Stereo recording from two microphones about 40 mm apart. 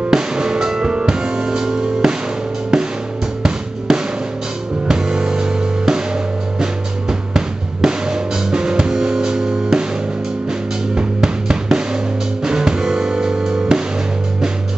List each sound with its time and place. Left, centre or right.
0.1 s drum kit: centre
2.7 s music: centre
11.0 s music: centre